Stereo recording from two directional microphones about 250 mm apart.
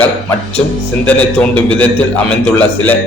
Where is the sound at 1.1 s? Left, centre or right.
Centre.